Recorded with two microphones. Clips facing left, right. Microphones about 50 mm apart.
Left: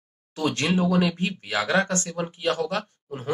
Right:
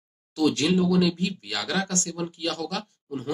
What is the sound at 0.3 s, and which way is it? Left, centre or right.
Speech, left.